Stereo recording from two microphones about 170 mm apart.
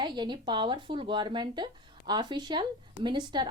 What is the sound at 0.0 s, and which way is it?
A woman's voice, 25° right (ahead or behind).